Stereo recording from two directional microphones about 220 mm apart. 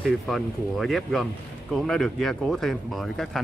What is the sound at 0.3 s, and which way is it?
Speech, centre (ahead or behind).